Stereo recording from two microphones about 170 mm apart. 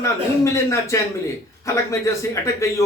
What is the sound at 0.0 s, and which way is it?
Speech, 15° left (ahead or behind).